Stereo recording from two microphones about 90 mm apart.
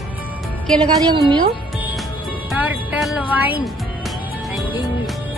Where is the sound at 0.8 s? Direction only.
55° right (ahead or behind).